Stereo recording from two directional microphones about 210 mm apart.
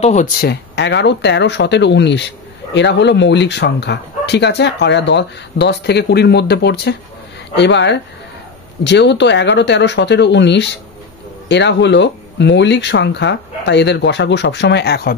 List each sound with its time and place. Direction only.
0.0 s speech: 35° left (ahead or behind)
0.4 s speech: 50° left (ahead or behind)